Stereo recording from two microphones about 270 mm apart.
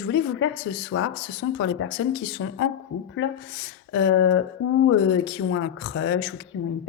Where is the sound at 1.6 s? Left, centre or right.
Left.